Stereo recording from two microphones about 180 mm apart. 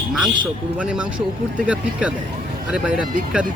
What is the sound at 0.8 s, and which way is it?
Speech, 5° right (ahead or behind).